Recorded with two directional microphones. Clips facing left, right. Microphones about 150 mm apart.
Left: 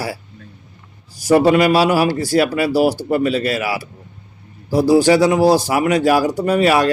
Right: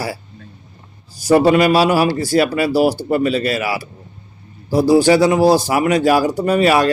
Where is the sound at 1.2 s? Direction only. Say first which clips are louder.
Even; 30° right (ahead or behind).